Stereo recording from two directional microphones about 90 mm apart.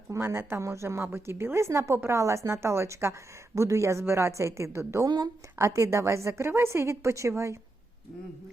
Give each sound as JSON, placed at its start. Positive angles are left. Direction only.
{"t": 0.1, "sound": "a woman's voice", "side_deg": -25}